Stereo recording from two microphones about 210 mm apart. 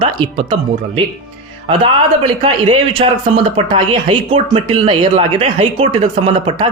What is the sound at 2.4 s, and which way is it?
Speech, 25° right (ahead or behind).